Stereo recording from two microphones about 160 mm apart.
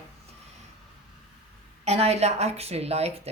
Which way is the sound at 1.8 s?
40° right (ahead or behind).